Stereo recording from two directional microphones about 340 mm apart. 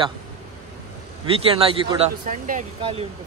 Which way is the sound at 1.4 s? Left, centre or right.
Centre.